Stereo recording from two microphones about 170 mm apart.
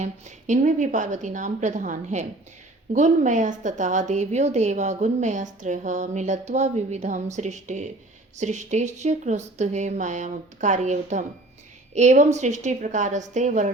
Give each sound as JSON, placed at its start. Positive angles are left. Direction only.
{"t": 0.0, "sound": "a woman's voice", "side_deg": -45}